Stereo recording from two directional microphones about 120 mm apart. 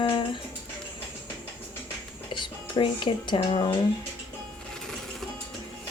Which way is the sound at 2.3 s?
40° left (ahead or behind).